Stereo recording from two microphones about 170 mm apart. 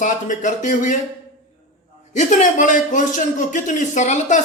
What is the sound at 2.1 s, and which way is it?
A man's voice, 45° left (ahead or behind).